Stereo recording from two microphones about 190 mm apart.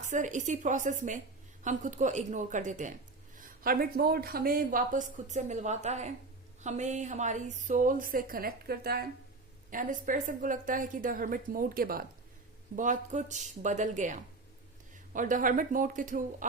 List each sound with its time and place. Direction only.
0.1 s a woman's voice: 40° right (ahead or behind)